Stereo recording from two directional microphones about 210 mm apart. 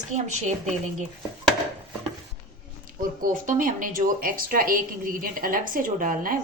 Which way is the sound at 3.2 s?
40° right (ahead or behind).